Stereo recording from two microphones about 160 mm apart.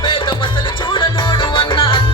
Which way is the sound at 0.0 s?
30° left (ahead or behind).